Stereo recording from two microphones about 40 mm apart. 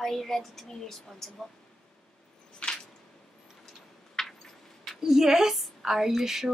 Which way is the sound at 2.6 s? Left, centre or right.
Left.